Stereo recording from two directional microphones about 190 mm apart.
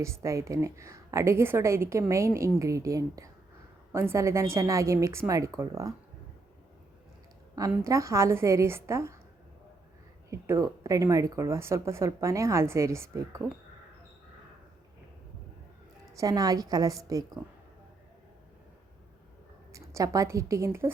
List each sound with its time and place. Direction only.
0.0 s a woman's voice: 15° right (ahead or behind)
7.5 s a woman's voice: 15° right (ahead or behind)
10.2 s a woman's voice: 15° right (ahead or behind)
16.1 s a woman's voice: 20° right (ahead or behind)
19.7 s a woman's voice: 15° right (ahead or behind)